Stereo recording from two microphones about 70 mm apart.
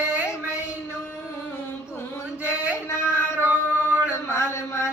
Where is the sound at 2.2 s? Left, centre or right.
Left.